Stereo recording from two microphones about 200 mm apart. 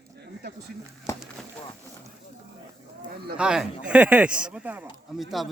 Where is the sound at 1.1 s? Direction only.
15° left (ahead or behind).